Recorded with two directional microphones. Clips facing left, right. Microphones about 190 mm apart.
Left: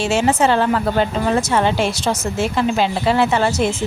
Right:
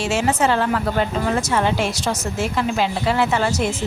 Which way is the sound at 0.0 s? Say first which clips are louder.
Left 3 dB; 25° left (ahead or behind).